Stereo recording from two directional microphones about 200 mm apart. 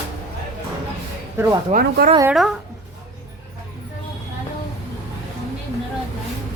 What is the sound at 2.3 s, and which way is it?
Speech, centre (ahead or behind).